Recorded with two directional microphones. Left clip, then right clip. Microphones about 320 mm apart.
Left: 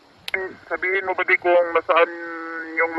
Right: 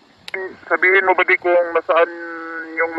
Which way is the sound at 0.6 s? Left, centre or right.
Right.